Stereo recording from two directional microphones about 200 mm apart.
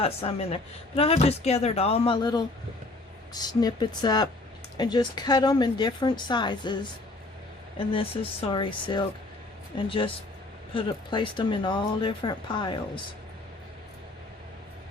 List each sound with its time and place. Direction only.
0.0 s speech: 30° left (ahead or behind)
7.8 s speech: 25° left (ahead or behind)